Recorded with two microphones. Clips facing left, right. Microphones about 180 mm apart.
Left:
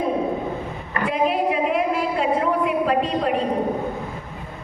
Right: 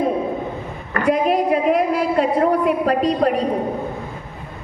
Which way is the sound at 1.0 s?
45° right (ahead or behind).